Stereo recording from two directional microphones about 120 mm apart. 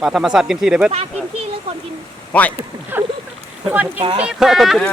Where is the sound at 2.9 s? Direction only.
15° right (ahead or behind).